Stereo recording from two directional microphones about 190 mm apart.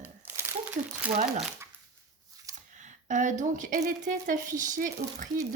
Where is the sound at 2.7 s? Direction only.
40° right (ahead or behind).